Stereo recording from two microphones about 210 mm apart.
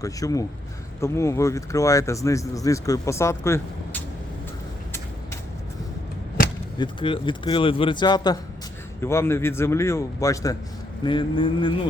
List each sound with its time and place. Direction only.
0.0 s speech: 15° left (ahead or behind)
6.7 s speech: 25° left (ahead or behind)